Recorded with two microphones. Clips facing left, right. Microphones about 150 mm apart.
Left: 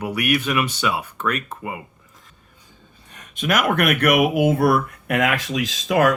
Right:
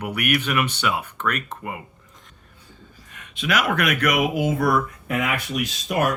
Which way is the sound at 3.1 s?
40° left (ahead or behind).